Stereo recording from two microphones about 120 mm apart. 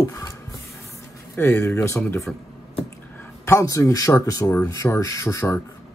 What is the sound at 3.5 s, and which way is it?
Speech, 25° left (ahead or behind).